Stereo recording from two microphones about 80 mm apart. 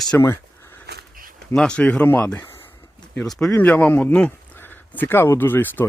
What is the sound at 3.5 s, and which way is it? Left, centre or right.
Speech, centre.